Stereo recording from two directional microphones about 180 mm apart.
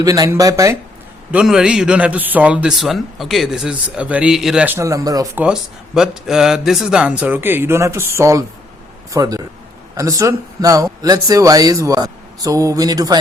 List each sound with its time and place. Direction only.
0.0 s speech: 20° right (ahead or behind)
1.3 s a man's voice: 5° right (ahead or behind); by 5.4 s 20° right (ahead or behind)
5.4 s speech: 5° right (ahead or behind); by 13.1 s 20° right (ahead or behind)